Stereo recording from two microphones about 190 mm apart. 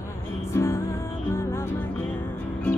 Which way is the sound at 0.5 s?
15° left (ahead or behind).